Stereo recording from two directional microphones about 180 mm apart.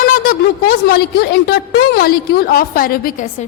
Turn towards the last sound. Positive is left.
turn(degrees=55)  # may be behind; listen again after turning